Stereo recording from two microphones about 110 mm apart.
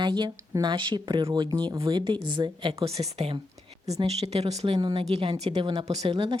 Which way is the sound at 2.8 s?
65° right (ahead or behind).